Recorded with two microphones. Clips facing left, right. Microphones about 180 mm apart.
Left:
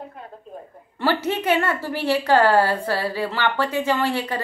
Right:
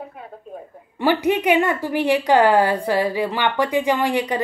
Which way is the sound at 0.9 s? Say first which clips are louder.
Right 4 dB; 15° right (ahead or behind).